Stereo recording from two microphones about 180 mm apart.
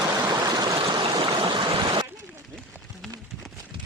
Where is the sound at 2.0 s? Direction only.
15° right (ahead or behind).